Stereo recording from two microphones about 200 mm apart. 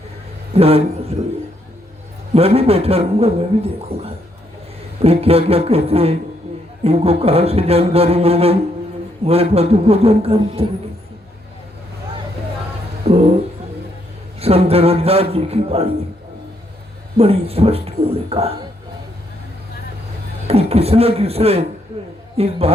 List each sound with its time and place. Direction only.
0.5 s speech: 30° right (ahead or behind)
2.3 s speech: 30° right (ahead or behind)
13.1 s speech: 30° right (ahead or behind)
14.3 s speech: 30° right (ahead or behind)
17.2 s speech: 30° right (ahead or behind)
20.5 s speech: 30° right (ahead or behind)